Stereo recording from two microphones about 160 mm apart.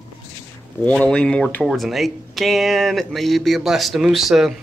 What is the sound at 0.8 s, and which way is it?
Speech, 5° left (ahead or behind).